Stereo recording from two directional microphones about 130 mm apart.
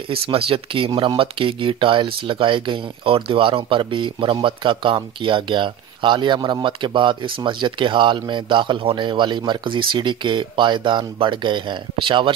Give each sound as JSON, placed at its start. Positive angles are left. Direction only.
{"t": 0.1, "sound": "speech", "side_deg": -45}